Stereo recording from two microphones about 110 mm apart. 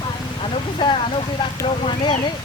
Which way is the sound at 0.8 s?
45° left (ahead or behind).